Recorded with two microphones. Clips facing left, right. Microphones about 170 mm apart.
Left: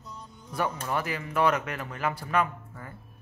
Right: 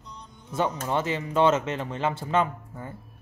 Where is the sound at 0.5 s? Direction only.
25° right (ahead or behind).